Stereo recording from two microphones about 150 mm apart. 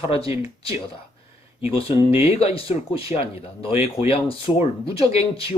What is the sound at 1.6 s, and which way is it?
Speech, 40° left (ahead or behind).